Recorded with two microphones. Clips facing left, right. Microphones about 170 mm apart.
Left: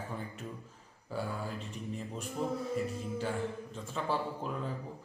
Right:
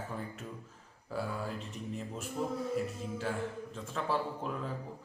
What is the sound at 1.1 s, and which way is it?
A man's voice, centre (ahead or behind).